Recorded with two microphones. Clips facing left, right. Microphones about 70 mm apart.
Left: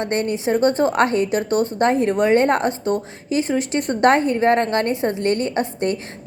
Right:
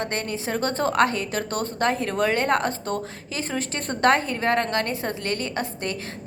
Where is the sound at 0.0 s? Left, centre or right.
Left.